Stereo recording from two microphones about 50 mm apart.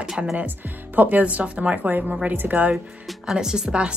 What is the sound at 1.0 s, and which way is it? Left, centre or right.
Speech, right.